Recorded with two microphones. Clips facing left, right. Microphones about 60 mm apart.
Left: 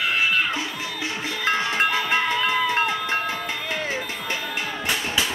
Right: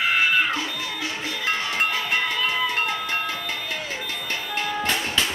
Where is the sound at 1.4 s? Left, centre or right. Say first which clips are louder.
Left 3 dB; left.